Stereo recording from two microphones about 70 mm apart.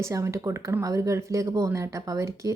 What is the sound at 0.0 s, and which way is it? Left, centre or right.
A woman's voice, right.